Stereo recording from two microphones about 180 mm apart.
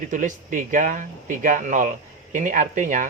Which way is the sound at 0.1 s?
45° right (ahead or behind).